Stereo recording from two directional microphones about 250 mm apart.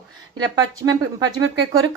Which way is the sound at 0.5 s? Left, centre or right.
Centre.